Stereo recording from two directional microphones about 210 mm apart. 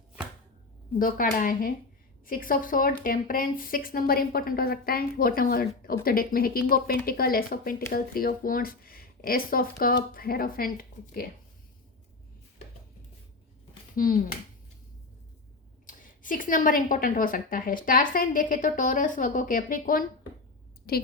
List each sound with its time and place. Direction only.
0.9 s a woman's voice: 40° left (ahead or behind)
13.9 s speech: 40° left (ahead or behind)
15.9 s a woman's voice: 40° left (ahead or behind)